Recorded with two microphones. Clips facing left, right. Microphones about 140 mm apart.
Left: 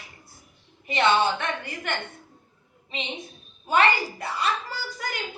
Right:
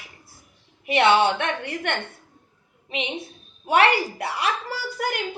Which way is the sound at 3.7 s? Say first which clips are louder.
Right 3 dB; 70° right (ahead or behind).